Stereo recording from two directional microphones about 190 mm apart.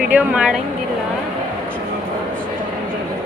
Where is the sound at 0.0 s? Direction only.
5° right (ahead or behind).